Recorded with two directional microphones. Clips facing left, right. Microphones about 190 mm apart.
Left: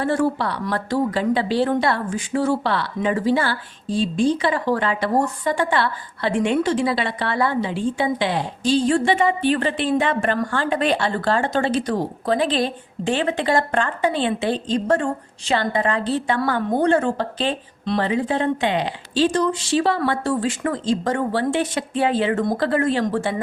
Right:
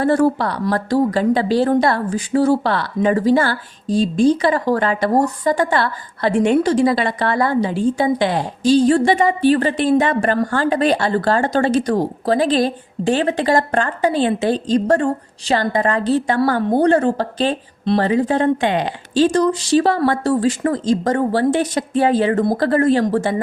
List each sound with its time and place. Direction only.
0.0 s a woman's voice: 40° right (ahead or behind)